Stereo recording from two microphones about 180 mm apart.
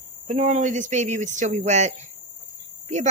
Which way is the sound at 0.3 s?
40° right (ahead or behind).